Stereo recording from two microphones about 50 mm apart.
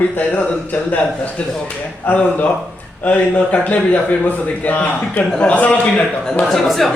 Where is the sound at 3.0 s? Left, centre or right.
Left.